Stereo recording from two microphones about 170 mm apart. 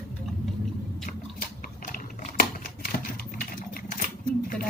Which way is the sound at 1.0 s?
55° left (ahead or behind).